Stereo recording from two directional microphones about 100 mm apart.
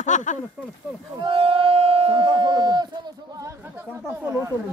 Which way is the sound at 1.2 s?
65° right (ahead or behind).